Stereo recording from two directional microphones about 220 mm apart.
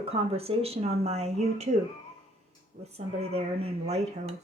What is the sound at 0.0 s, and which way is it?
Speech, 25° right (ahead or behind).